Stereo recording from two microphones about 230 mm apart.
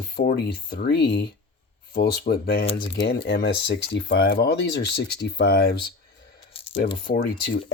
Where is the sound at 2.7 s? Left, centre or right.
Left.